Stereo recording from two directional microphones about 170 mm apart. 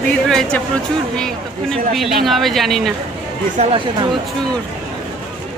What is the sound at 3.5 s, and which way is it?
Speech, 35° right (ahead or behind).